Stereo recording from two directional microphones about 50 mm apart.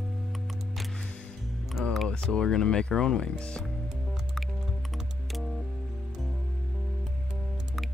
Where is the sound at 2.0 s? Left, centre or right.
Centre.